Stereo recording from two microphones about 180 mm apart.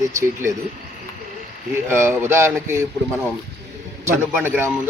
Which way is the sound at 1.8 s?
15° right (ahead or behind).